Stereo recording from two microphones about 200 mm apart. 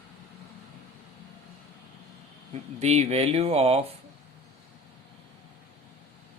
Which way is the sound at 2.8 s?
35° right (ahead or behind).